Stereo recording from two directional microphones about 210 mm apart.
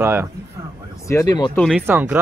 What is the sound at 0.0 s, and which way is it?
Speech, 10° right (ahead or behind).